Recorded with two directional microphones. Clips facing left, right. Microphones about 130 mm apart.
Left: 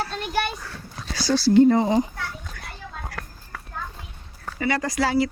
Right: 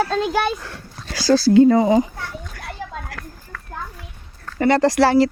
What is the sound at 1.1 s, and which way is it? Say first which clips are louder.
Speech: right 4 dB; 90° right.